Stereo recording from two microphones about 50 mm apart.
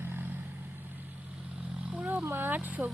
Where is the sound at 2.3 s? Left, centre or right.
Right.